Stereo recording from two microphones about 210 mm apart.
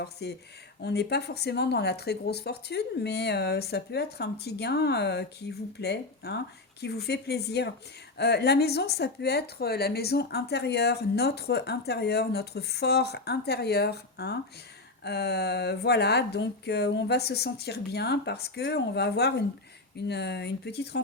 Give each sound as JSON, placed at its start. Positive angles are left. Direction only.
{"t": 0.0, "sound": "speech", "side_deg": 55}